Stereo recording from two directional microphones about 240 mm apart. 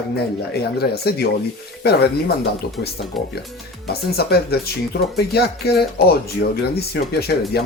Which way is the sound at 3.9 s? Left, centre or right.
Left.